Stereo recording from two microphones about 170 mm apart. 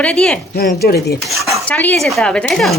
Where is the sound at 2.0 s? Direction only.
5° left (ahead or behind).